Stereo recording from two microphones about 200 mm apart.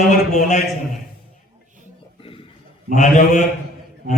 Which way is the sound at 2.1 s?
25° left (ahead or behind).